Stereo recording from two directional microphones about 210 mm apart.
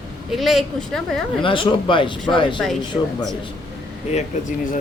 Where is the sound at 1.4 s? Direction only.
25° left (ahead or behind).